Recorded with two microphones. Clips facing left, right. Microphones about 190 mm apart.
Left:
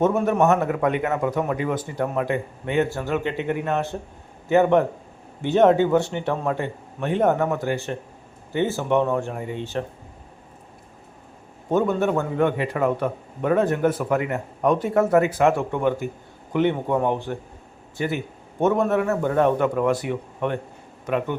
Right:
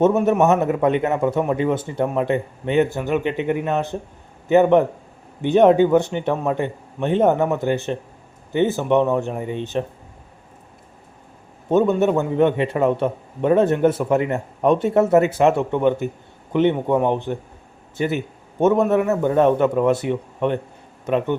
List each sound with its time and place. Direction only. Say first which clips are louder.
0.0 s a man's voice: right 3 dB; 20° right (ahead or behind)
11.7 s a man's voice: right 4 dB; 20° right (ahead or behind)